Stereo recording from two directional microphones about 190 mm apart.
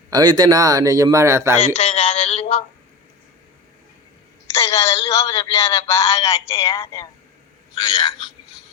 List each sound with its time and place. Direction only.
0.1 s a man's voice: 20° right (ahead or behind)
1.7 s speech: 30° left (ahead or behind)
4.5 s a man's voice: 15° left (ahead or behind)